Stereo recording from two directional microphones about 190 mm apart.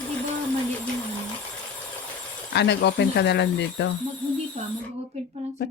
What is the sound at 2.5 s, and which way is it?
Speech, 65° left (ahead or behind).